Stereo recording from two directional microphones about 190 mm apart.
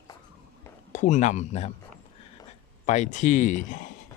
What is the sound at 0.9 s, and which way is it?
Speech, 40° left (ahead or behind).